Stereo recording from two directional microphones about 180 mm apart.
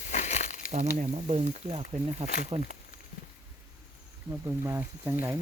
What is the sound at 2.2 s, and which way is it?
Speech, 60° left (ahead or behind).